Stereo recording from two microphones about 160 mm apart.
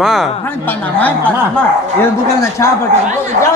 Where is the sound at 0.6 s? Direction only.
10° left (ahead or behind).